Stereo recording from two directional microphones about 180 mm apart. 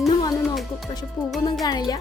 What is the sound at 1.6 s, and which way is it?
Speech, 20° left (ahead or behind).